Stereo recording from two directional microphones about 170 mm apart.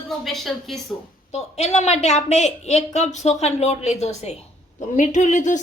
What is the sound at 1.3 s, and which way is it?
A woman's voice, 40° left (ahead or behind).